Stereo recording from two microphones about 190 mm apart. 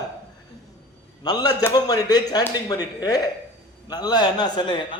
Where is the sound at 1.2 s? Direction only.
20° left (ahead or behind).